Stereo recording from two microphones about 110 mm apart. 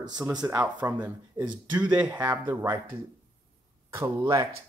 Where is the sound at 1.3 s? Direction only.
40° right (ahead or behind).